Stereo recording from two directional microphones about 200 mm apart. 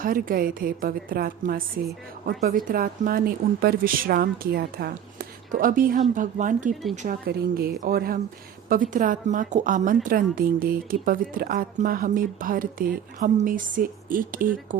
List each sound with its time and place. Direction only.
0.0 s a woman's voice: 45° right (ahead or behind)
7.3 s a woman's voice: 50° right (ahead or behind)